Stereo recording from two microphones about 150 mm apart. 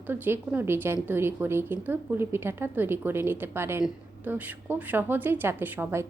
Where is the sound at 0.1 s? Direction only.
15° right (ahead or behind).